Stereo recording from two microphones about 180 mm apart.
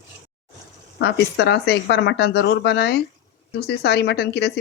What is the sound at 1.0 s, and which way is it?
Speech, 65° left (ahead or behind).